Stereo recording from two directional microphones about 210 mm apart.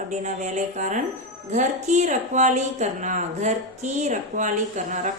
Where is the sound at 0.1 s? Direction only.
35° right (ahead or behind).